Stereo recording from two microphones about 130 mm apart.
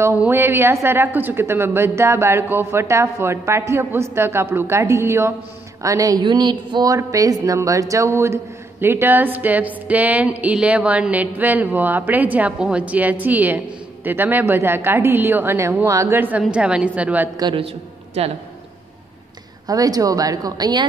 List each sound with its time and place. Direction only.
0.2 s a woman's voice: 15° right (ahead or behind)
19.7 s a woman's voice: 30° right (ahead or behind)